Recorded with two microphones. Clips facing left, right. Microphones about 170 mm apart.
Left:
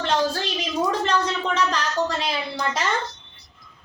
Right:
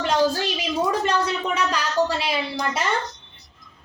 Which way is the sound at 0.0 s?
10° right (ahead or behind).